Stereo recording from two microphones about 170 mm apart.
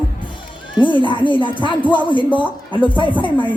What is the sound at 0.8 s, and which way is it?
Speech, 30° left (ahead or behind).